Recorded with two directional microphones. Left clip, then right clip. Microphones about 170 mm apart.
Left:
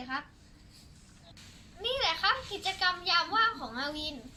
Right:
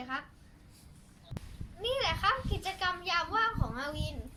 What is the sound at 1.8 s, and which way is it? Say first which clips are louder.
Speech: left 1 dB; centre (ahead or behind).